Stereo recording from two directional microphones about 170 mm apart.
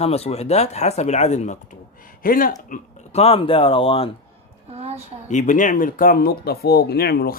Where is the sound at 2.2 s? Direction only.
55° left (ahead or behind).